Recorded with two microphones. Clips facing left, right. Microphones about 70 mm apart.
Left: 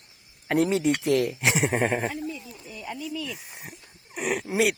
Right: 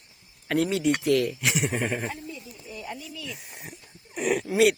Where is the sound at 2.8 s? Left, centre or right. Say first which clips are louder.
Left 5 dB; centre.